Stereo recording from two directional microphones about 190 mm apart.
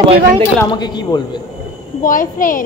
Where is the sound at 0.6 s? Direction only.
20° left (ahead or behind).